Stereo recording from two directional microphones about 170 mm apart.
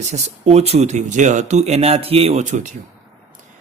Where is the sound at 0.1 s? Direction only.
40° right (ahead or behind).